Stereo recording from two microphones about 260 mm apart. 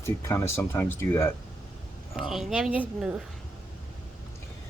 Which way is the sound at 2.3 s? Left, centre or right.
Centre.